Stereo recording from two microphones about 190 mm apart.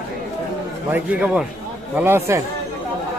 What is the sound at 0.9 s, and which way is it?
A man's voice, 5° right (ahead or behind).